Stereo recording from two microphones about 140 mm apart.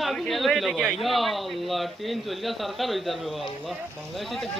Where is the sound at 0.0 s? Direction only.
Centre (ahead or behind).